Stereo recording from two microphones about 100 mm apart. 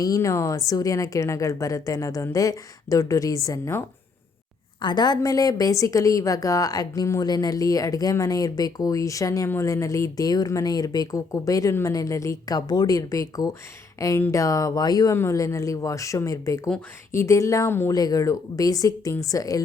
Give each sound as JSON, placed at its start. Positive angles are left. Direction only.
{"t": 0.0, "sound": "a woman's voice", "side_deg": 35}
{"t": 4.8, "sound": "a woman's voice", "side_deg": 45}
{"t": 15.1, "sound": "a woman's voice", "side_deg": 30}
{"t": 17.9, "sound": "a woman's voice", "side_deg": 40}